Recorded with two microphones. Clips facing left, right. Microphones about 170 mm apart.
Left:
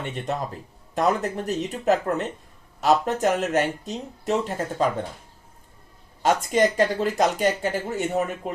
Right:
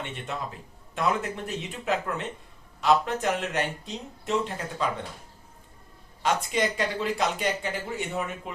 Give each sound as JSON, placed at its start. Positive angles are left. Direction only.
{"t": 0.9, "sound": "speech", "side_deg": 40}
{"t": 6.2, "sound": "speech", "side_deg": 45}